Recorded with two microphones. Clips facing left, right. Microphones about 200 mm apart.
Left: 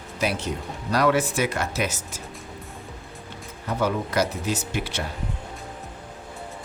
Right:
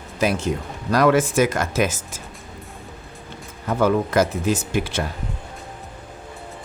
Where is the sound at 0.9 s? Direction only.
50° right (ahead or behind).